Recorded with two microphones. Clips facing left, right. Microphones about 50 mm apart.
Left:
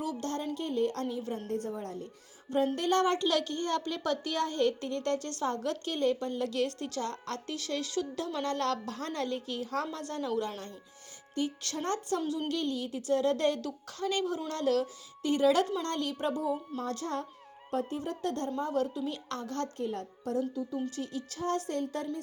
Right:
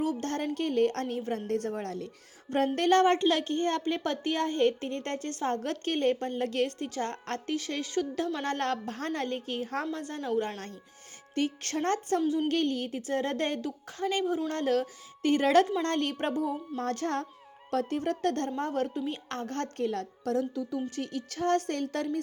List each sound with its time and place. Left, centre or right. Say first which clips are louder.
0.0 s a woman's voice: right 4 dB; right
2.7 s a woman's voice: right 5 dB; right
3.0 s a woman's voice: right 4 dB; right
11.3 s a woman's voice: right 4 dB; right
17.7 s speech: right 4 dB; right
18.7 s a woman's voice: right 1 dB; right
19.8 s a woman's voice: right 4 dB; right
20.9 s speech: right 2 dB; right